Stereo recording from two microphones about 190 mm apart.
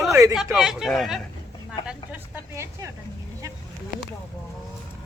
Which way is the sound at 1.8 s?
10° right (ahead or behind).